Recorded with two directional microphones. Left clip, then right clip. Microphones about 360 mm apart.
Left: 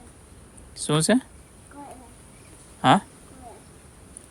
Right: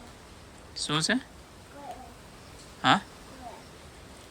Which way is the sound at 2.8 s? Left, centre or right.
Centre.